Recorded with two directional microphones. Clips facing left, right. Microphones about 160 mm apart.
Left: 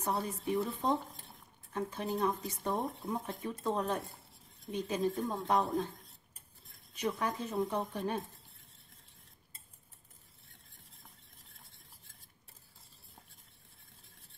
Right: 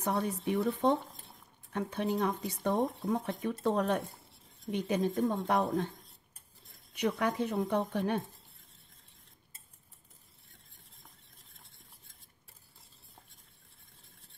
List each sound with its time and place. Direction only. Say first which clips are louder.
0.0 s a woman's voice: right 3 dB; 65° right (ahead or behind)
6.9 s a woman's voice: right 4 dB; 65° right (ahead or behind)